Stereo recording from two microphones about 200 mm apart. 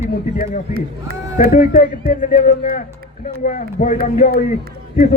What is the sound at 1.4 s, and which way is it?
Speech, 45° left (ahead or behind).